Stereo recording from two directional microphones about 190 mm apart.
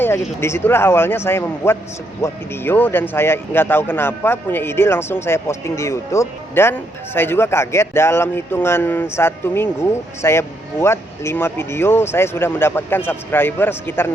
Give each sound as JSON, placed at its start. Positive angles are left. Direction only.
{"t": 0.3, "sound": "speech", "side_deg": 10}